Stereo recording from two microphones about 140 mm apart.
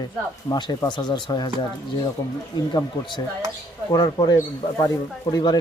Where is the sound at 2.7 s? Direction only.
35° left (ahead or behind).